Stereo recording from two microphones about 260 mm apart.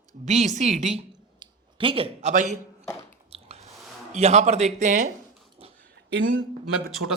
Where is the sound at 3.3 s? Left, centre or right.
Right.